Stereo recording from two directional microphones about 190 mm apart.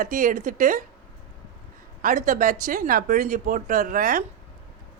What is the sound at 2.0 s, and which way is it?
A woman's voice, 45° right (ahead or behind).